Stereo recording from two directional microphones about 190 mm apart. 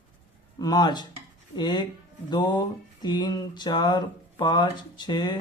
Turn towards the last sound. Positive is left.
turn(degrees=20)  # may be behind; listen again after turning